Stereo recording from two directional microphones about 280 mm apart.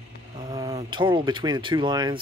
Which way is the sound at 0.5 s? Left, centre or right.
Centre.